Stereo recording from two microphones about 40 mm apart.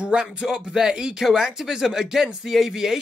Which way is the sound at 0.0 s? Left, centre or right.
Right.